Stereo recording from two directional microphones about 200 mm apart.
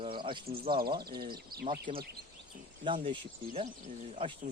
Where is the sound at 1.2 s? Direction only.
50° right (ahead or behind).